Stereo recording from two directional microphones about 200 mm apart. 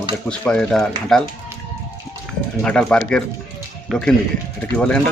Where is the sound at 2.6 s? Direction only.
5° left (ahead or behind).